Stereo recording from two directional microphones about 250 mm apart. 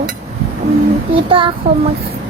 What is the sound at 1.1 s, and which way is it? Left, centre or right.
Speech, right.